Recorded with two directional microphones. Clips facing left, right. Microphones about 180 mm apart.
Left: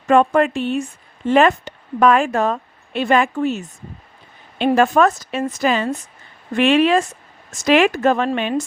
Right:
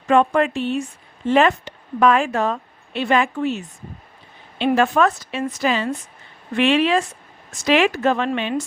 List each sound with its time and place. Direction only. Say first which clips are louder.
0.1 s a woman's voice: left 2 dB; 45° left (ahead or behind)